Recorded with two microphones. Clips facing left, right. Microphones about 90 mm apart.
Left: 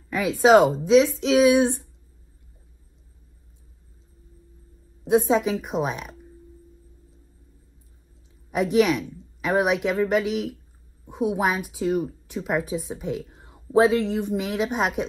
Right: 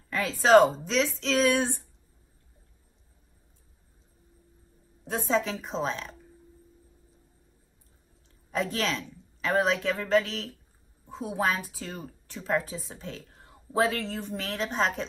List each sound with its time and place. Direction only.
0.1 s speech: 15° left (ahead or behind)
5.0 s speech: 10° left (ahead or behind)
8.5 s speech: 15° left (ahead or behind)